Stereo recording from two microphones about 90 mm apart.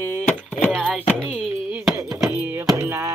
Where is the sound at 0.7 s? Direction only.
10° left (ahead or behind).